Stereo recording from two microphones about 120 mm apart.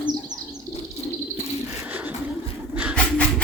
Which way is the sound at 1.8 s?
15° right (ahead or behind).